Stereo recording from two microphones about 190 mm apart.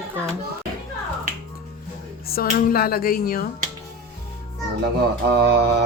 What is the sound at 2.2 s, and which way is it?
Speech, 50° left (ahead or behind).